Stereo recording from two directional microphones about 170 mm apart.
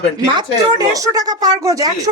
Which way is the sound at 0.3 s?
20° right (ahead or behind).